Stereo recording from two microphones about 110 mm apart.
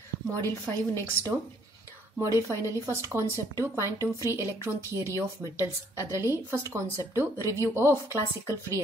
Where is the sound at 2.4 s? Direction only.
25° right (ahead or behind).